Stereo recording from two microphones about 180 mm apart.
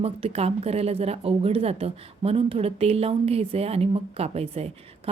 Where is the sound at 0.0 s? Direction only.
35° right (ahead or behind).